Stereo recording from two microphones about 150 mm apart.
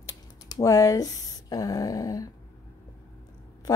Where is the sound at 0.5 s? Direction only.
25° left (ahead or behind).